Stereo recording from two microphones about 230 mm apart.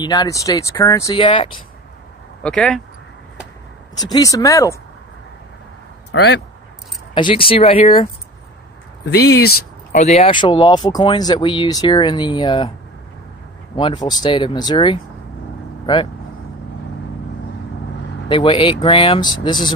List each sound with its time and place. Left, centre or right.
0.0 s speech: centre
2.4 s speech: centre
4.0 s speech: centre
6.1 s speech: left
7.1 s speech: left
9.0 s speech: left
9.9 s speech: left
13.7 s speech: left
18.3 s speech: left